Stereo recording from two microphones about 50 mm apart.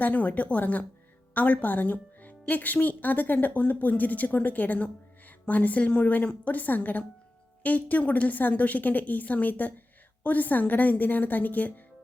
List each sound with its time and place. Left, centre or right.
0.0 s a woman's voice: left